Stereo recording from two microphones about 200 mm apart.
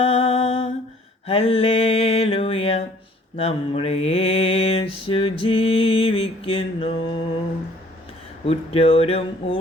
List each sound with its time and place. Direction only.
0.0 s humming: 30° left (ahead or behind)
1.3 s mantra: 30° left (ahead or behind)
8.4 s speech: 30° left (ahead or behind)